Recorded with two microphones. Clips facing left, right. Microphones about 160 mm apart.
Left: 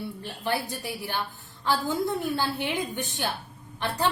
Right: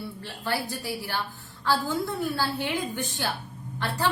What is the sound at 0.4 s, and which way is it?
A woman's voice, 20° left (ahead or behind).